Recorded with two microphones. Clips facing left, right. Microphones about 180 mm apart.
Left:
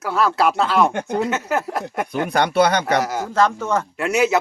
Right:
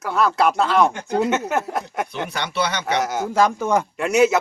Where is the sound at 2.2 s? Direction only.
55° left (ahead or behind).